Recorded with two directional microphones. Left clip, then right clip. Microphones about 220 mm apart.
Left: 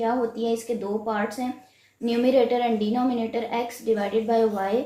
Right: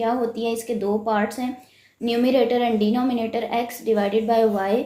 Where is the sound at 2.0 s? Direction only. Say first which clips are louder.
Right 1 dB; 45° right (ahead or behind).